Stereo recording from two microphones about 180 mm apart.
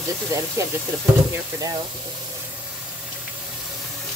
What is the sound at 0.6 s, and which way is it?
Speech, 15° right (ahead or behind).